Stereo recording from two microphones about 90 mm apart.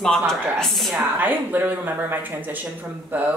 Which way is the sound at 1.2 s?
20° right (ahead or behind).